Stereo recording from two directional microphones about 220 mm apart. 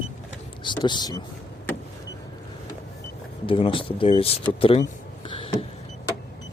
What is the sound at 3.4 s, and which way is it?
Speech, 25° left (ahead or behind).